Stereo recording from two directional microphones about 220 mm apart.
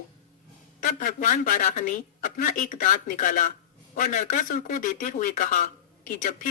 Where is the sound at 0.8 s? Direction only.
35° left (ahead or behind).